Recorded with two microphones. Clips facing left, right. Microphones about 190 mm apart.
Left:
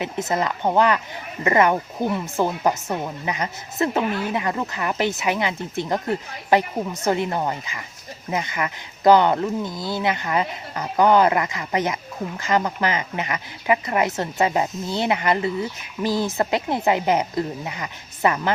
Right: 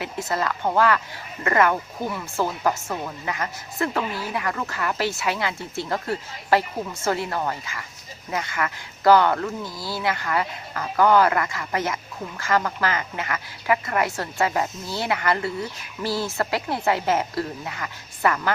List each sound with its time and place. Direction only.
0.0 s speech: 20° left (ahead or behind)
4.0 s speech: 60° left (ahead or behind)
4.3 s speech: 20° left (ahead or behind)